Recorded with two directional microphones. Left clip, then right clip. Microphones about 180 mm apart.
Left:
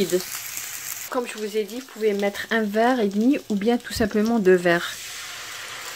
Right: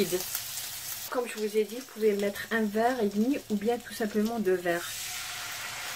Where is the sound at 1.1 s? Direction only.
55° left (ahead or behind).